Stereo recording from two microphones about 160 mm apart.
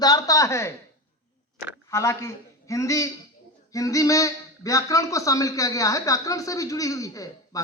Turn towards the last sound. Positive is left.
turn(degrees=20)  # may be behind; listen again after turning